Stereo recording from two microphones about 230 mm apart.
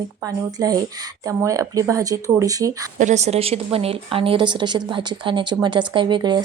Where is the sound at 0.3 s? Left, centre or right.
Centre.